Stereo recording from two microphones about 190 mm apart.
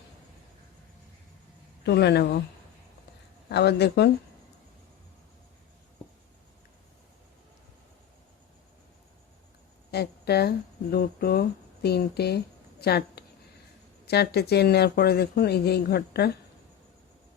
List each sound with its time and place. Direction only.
1.8 s speech: 60° left (ahead or behind)
3.5 s speech: 60° left (ahead or behind)
9.9 s speech: 55° left (ahead or behind)